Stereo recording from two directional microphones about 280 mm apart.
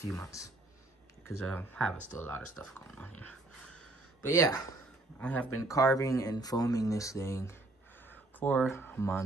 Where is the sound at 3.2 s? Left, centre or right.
Centre.